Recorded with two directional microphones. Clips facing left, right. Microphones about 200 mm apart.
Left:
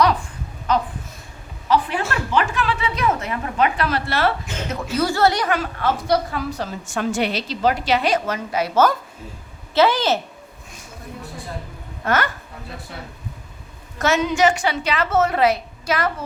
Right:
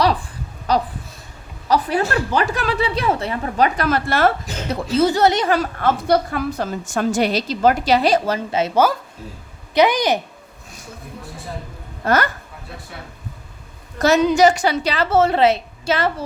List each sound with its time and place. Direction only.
0.0 s a sound: 30° right (ahead or behind)
0.7 s a woman's voice: 35° right (ahead or behind)
4.7 s a woman's voice: 35° right (ahead or behind)
5.0 s speech: 20° right (ahead or behind)
5.8 s a woman's voice: 55° right (ahead or behind); by 10.2 s 15° right (ahead or behind)
12.0 s a woman's voice: 40° right (ahead or behind)
14.0 s a woman's voice: 35° right (ahead or behind)